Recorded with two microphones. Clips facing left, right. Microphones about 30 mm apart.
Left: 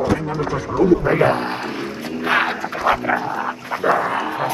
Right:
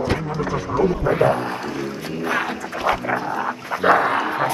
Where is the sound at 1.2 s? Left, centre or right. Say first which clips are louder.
Left 1 dB; left.